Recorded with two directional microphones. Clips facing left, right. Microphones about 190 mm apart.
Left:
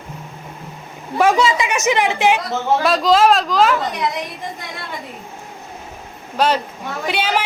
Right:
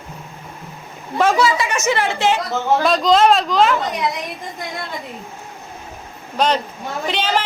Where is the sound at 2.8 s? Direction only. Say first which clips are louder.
Even; 5° left (ahead or behind).